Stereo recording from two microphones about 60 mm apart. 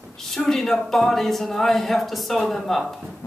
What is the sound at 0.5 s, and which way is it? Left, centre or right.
Speech, centre.